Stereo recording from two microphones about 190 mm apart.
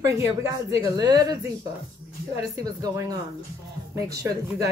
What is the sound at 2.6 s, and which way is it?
A woman's voice, 20° right (ahead or behind).